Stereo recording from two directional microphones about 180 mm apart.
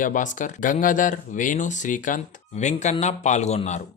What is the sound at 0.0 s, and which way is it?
Speech, 45° left (ahead or behind).